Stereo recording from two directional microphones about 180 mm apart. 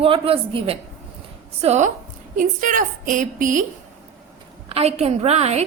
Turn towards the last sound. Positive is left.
turn(degrees=-35)  # may be behind; listen again after turning